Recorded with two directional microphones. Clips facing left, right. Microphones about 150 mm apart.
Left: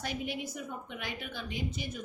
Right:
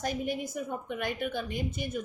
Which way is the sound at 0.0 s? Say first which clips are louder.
Right 4 dB; 45° right (ahead or behind).